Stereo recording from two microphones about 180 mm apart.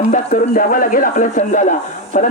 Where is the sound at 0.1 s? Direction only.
45° left (ahead or behind).